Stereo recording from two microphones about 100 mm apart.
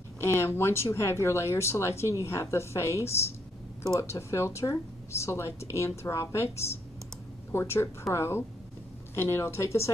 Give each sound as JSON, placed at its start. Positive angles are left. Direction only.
{"t": 0.2, "sound": "speech", "side_deg": 25}